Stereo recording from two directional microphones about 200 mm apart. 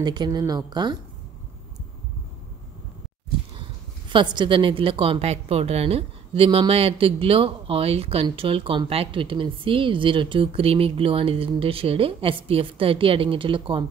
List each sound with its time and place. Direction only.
0.0 s a woman's voice: 20° right (ahead or behind)
4.1 s a woman's voice: 25° right (ahead or behind)